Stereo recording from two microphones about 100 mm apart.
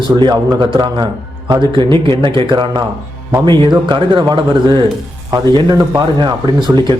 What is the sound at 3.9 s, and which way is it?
Speech, 45° right (ahead or behind).